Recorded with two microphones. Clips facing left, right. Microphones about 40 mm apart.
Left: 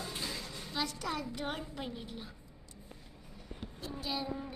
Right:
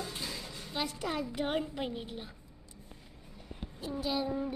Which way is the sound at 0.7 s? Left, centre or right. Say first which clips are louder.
Right 2 dB; centre.